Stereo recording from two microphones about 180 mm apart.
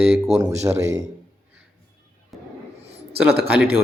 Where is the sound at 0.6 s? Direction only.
15° right (ahead or behind).